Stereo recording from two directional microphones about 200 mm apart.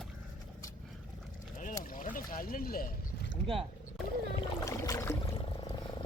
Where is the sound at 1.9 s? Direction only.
45° left (ahead or behind).